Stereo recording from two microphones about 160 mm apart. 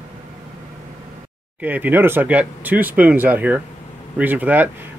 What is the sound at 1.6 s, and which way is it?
Speech, 10° right (ahead or behind).